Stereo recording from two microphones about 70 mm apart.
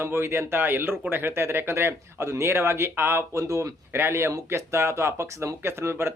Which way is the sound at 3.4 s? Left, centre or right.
Right.